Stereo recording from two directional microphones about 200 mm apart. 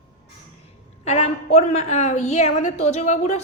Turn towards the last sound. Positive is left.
turn(degrees=35)  # may be behind; listen again after turning